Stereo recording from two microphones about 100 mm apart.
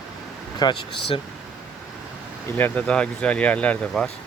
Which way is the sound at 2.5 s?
15° left (ahead or behind).